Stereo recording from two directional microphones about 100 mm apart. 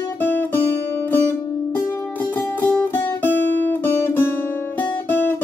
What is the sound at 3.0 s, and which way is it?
Guitar, 20° left (ahead or behind).